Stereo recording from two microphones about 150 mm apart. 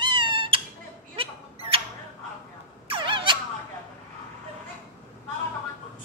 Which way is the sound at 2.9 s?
35° right (ahead or behind).